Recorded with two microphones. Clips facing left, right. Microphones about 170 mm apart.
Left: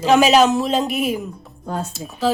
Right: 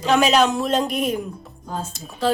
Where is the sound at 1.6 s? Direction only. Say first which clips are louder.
Left 4 dB; 70° left (ahead or behind).